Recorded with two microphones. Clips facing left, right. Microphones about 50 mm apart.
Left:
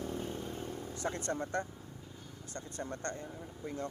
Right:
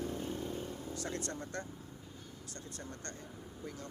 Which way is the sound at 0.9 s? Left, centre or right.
Left.